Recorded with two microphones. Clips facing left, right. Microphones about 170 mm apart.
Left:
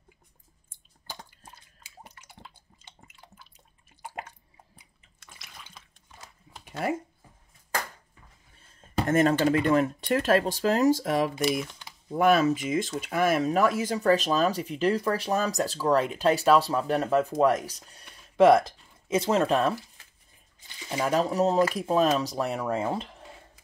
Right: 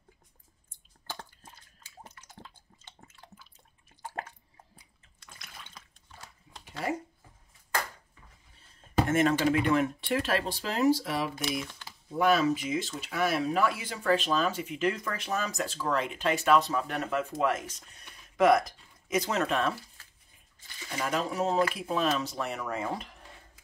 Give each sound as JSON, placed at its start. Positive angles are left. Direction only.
{"t": 3.5, "sound": "drip", "side_deg": 15}
{"t": 9.0, "sound": "speech", "side_deg": 40}
{"t": 21.1, "sound": "speech", "side_deg": 40}